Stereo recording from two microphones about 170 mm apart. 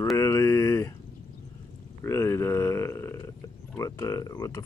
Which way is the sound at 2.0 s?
15° left (ahead or behind).